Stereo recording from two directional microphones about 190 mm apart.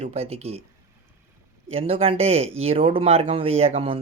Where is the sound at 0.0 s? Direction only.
35° right (ahead or behind).